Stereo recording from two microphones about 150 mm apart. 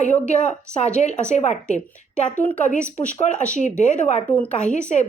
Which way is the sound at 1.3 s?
50° left (ahead or behind).